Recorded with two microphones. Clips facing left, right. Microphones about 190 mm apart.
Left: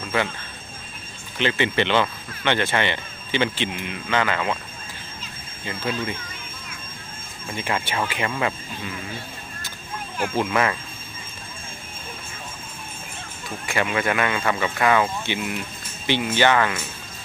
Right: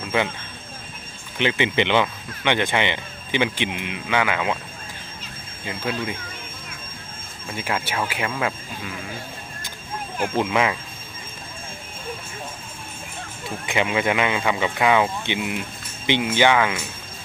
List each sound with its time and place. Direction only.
0.0 s a sound: 15° right (ahead or behind)
1.4 s speech: 15° right (ahead or behind)
5.6 s speech: 10° right (ahead or behind)
7.4 s speech: 5° right (ahead or behind)
10.3 s speech: 15° right (ahead or behind)
13.7 s speech: 20° right (ahead or behind)